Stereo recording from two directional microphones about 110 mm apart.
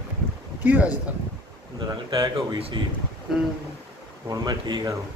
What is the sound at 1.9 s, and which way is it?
Speech, 40° right (ahead or behind).